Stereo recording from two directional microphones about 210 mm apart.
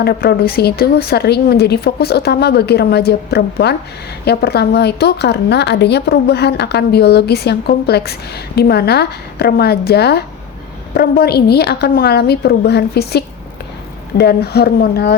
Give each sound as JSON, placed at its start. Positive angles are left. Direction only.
{"t": 0.0, "sound": "a woman's voice", "side_deg": 50}